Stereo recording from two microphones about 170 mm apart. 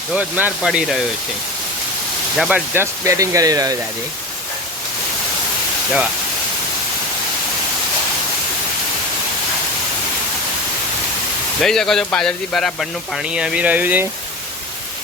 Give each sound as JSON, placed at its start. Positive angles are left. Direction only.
{"t": 0.1, "sound": "speech", "side_deg": -10}
{"t": 2.3, "sound": "speech", "side_deg": 0}
{"t": 2.7, "sound": "speech", "side_deg": -15}
{"t": 11.6, "sound": "speech", "side_deg": 0}